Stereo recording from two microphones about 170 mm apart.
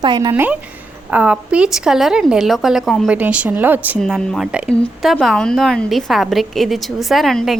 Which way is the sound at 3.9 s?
Centre (ahead or behind).